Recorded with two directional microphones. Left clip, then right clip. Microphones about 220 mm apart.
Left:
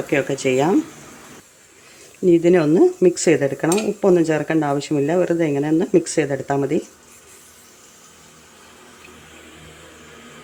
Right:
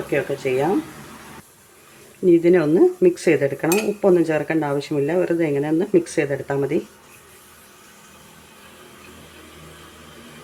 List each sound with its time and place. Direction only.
0.1 s speech: 25° left (ahead or behind)
2.2 s speech: 10° left (ahead or behind)